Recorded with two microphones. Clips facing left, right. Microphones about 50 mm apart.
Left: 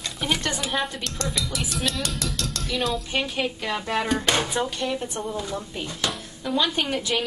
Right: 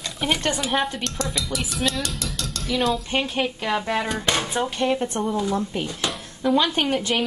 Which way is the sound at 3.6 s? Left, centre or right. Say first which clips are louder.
Right 3 dB; centre.